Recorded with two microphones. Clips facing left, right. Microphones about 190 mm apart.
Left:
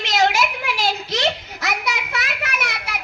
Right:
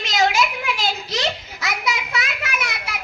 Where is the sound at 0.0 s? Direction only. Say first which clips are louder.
Left 1 dB; 65° left (ahead or behind).